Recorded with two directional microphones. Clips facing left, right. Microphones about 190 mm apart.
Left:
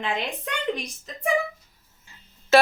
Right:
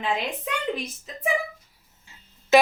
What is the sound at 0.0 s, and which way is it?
A woman's voice, 5° right (ahead or behind).